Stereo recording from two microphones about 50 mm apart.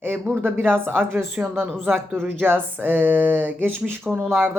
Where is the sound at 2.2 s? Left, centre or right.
Right.